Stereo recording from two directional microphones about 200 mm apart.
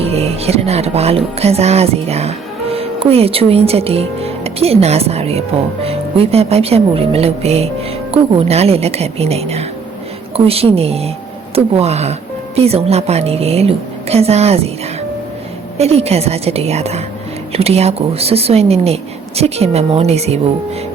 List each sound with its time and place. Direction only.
0.0 s a woman's voice: 30° right (ahead or behind)
15.8 s a woman's voice: 30° right (ahead or behind)